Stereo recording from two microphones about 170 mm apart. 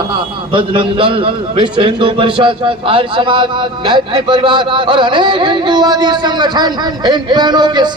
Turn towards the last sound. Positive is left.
turn(degrees=-25)  # may be behind; listen again after turning